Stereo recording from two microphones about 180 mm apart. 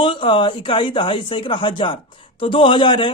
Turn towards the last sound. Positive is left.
turn(degrees=25)  # may be behind; listen again after turning